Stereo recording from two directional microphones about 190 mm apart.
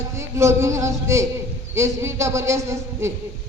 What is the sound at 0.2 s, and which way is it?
A man's voice, 15° right (ahead or behind).